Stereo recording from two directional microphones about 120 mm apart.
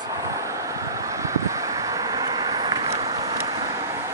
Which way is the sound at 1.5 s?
30° right (ahead or behind).